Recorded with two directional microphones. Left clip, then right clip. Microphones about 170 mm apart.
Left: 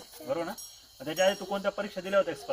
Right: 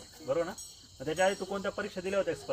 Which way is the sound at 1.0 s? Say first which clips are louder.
Left 2 dB; 25° right (ahead or behind).